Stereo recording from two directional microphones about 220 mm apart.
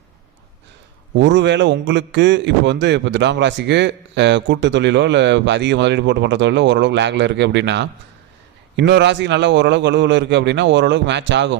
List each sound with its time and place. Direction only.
1.1 s a man's voice: 55° right (ahead or behind)